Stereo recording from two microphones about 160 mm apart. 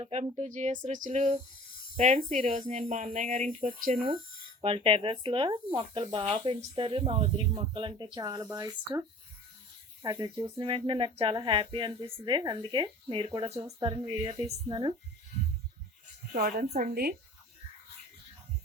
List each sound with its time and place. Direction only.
0.0 s speech: 40° right (ahead or behind)
4.6 s speech: 35° right (ahead or behind); by 8.7 s 20° right (ahead or behind)
10.0 s speech: 25° right (ahead or behind)
13.7 s speech: 20° right (ahead or behind)
14.1 s speech: 40° right (ahead or behind)
14.7 s speech: 30° right (ahead or behind)
16.3 s speech: 70° right (ahead or behind)